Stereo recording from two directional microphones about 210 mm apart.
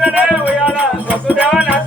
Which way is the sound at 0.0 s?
5° right (ahead or behind).